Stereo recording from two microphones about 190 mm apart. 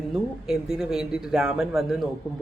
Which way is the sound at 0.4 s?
5° right (ahead or behind).